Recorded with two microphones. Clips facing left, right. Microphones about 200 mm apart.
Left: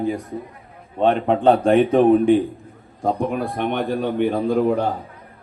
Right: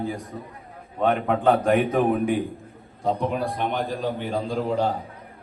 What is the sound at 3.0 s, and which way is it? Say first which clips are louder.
A man's voice: left 3 dB; 50° left (ahead or behind).